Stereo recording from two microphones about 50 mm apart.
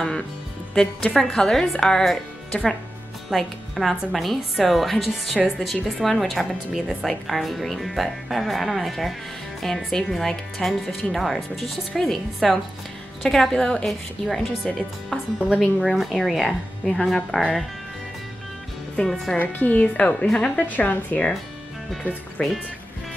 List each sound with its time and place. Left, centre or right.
0.7 s speech: centre
3.3 s a woman's voice: centre
6.7 s speech: centre
7.1 s a woman's voice: centre
11.1 s a woman's voice: centre
18.9 s speech: centre
19.3 s a woman's voice: left
19.8 s a woman's voice: left
20.6 s a woman's voice: left